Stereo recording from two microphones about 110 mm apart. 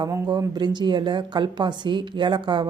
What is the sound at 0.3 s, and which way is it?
A woman's voice, 40° right (ahead or behind).